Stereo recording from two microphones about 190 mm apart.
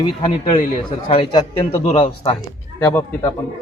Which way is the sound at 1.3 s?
20° left (ahead or behind).